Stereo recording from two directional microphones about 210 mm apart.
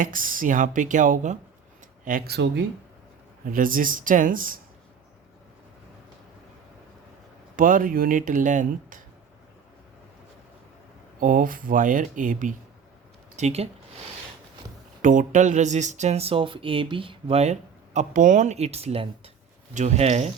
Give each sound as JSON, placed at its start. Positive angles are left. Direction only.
{"t": 0.0, "sound": "speech", "side_deg": -40}
{"t": 3.4, "sound": "speech", "side_deg": -40}
{"t": 7.5, "sound": "speech", "side_deg": -40}
{"t": 11.2, "sound": "speech", "side_deg": -40}
{"t": 15.0, "sound": "speech", "side_deg": -35}